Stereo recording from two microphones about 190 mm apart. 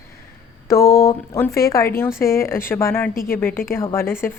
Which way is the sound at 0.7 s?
15° left (ahead or behind).